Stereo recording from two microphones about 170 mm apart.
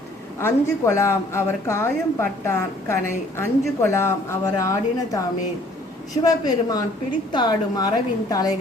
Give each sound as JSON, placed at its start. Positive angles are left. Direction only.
{"t": 0.3, "sound": "a woman's voice", "side_deg": 15}
{"t": 6.2, "sound": "a woman's voice", "side_deg": 20}